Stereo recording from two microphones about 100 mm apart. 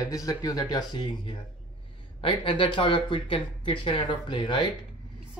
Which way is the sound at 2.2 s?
60° left (ahead or behind).